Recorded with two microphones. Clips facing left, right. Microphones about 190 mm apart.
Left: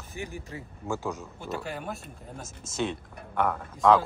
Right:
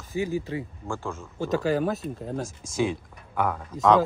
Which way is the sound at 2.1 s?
85° right.